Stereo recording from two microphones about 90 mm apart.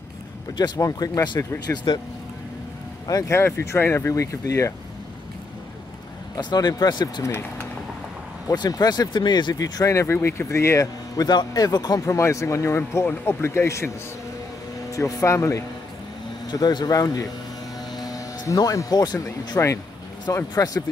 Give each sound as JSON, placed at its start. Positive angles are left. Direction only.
{"t": 0.7, "sound": "speech", "side_deg": 40}
{"t": 1.7, "sound": "speech", "side_deg": 20}
{"t": 3.3, "sound": "speech", "side_deg": 30}
{"t": 6.3, "sound": "speech", "side_deg": 45}
{"t": 8.5, "sound": "speech", "side_deg": 45}
{"t": 11.1, "sound": "speech", "side_deg": 50}
{"t": 16.4, "sound": "speech", "side_deg": 50}
{"t": 17.9, "sound": "music", "side_deg": 45}
{"t": 19.5, "sound": "speech", "side_deg": 35}